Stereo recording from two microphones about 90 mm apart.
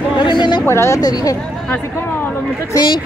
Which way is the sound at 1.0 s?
45° left (ahead or behind).